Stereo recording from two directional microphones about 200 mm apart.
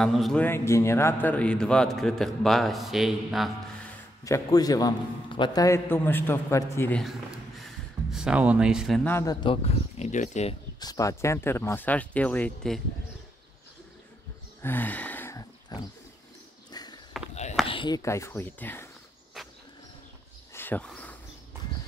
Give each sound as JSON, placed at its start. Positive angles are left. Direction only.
{"t": 0.0, "sound": "a man's voice", "side_deg": 0}
{"t": 4.2, "sound": "a man's voice", "side_deg": 15}
{"t": 7.0, "sound": "speech", "side_deg": 0}
{"t": 9.1, "sound": "speech", "side_deg": 20}
{"t": 10.8, "sound": "a man's voice", "side_deg": 15}
{"t": 14.6, "sound": "wild animals", "side_deg": 10}
{"t": 16.7, "sound": "a sound", "side_deg": 20}
{"t": 17.6, "sound": "a man's voice", "side_deg": 25}
{"t": 19.4, "sound": "a sound", "side_deg": 0}
{"t": 20.5, "sound": "wild animals", "side_deg": 10}